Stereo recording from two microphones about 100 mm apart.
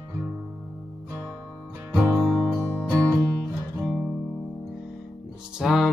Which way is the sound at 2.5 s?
25° right (ahead or behind).